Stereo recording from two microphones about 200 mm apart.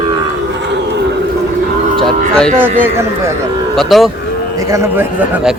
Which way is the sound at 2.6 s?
10° right (ahead or behind).